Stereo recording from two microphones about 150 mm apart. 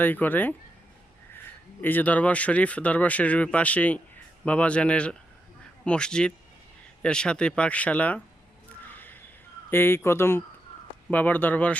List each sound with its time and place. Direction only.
0.0 s speech: 10° left (ahead or behind)
1.8 s speech: 10° left (ahead or behind)
8.9 s a sound: 10° left (ahead or behind)
9.6 s speech: 15° left (ahead or behind)